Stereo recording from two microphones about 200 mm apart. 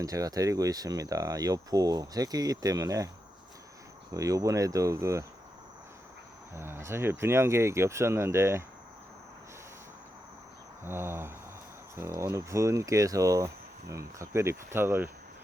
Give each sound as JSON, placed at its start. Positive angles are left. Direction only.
{"t": 0.0, "sound": "speech", "side_deg": -15}
{"t": 4.1, "sound": "speech", "side_deg": -15}
{"t": 6.5, "sound": "speech", "side_deg": -10}
{"t": 10.8, "sound": "speech", "side_deg": -10}